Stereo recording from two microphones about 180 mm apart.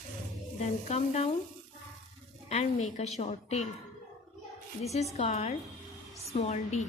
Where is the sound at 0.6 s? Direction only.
40° left (ahead or behind).